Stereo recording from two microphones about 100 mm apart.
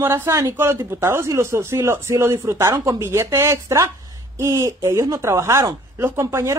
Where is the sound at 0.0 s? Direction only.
25° right (ahead or behind).